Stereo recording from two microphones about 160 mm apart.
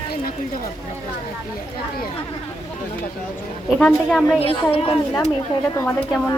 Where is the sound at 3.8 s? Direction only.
Centre (ahead or behind).